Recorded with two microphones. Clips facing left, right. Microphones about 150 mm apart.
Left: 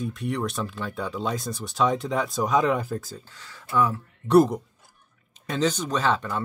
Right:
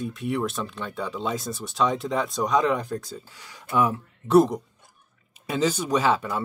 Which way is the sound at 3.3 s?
15° right (ahead or behind).